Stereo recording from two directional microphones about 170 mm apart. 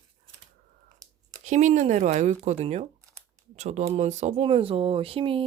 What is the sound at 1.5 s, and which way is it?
Speech, 45° right (ahead or behind).